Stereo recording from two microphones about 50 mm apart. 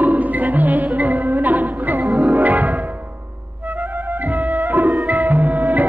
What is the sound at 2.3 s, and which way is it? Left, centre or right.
Music, right.